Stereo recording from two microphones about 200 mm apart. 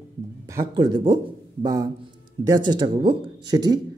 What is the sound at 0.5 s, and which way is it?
A man's voice, 20° right (ahead or behind).